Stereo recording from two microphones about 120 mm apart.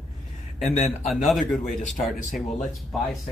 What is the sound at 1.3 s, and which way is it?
Speech, centre (ahead or behind).